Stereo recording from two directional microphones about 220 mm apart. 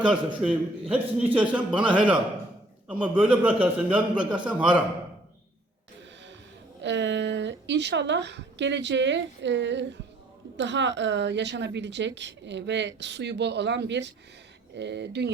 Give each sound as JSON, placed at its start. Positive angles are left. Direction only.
{"t": 0.4, "sound": "a man's voice", "side_deg": -5}
{"t": 6.8, "sound": "a woman's voice", "side_deg": -55}